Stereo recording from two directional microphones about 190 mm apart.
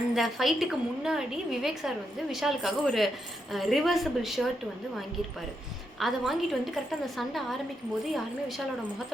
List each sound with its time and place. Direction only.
0.1 s a woman's voice: centre (ahead or behind)
6.0 s a woman's voice: centre (ahead or behind)